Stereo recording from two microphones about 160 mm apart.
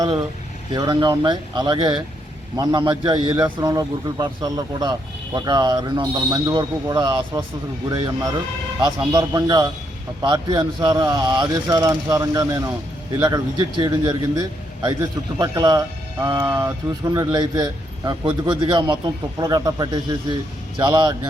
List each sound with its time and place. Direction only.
0.7 s speech: 25° right (ahead or behind)